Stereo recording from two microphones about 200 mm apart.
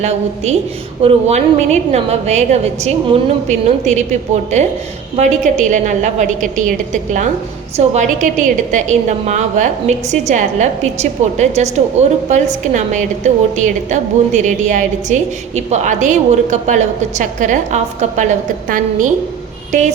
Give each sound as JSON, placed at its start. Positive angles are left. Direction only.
{"t": 0.0, "sound": "a woman's voice", "side_deg": -35}